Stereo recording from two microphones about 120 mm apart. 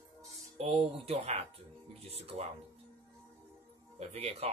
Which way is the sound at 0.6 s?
60° right (ahead or behind).